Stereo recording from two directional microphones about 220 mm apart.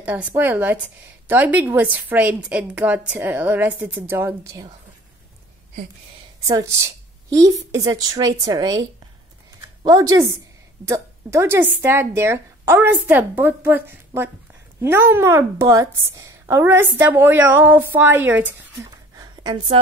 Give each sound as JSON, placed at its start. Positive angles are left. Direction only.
{"t": 0.0, "sound": "a woman's voice", "side_deg": -10}
{"t": 6.4, "sound": "a woman's voice", "side_deg": -15}
{"t": 9.8, "sound": "a woman's voice", "side_deg": -15}